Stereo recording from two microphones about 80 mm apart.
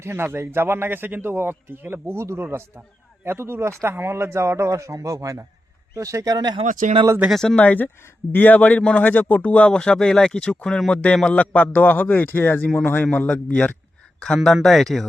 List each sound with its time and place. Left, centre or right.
0.0 s a man's voice: right
6.3 s speech: right
7.3 s speech: centre
7.5 s a man's voice: left
14.4 s speech: centre